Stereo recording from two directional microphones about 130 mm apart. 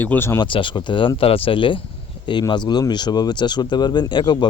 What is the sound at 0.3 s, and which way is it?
Speech, 40° left (ahead or behind).